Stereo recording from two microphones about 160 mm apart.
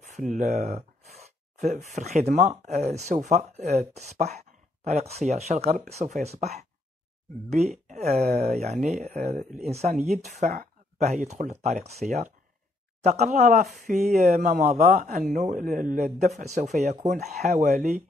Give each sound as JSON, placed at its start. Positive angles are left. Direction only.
{"t": 0.0, "sound": "speech", "side_deg": -50}
{"t": 2.0, "sound": "a man's voice", "side_deg": -45}
{"t": 13.4, "sound": "a man's voice", "side_deg": -50}